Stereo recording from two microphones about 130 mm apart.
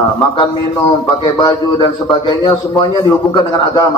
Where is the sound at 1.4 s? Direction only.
35° left (ahead or behind).